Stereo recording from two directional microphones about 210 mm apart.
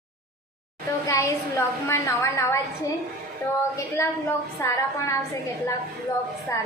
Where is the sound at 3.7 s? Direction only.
10° left (ahead or behind).